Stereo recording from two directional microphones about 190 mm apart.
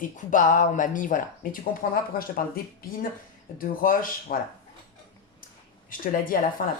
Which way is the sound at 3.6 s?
45° left (ahead or behind).